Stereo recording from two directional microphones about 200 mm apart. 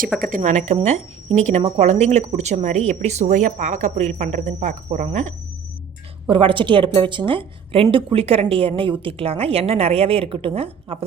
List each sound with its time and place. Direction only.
0.2 s speech: 40° right (ahead or behind)
6.2 s a woman's voice: 25° right (ahead or behind)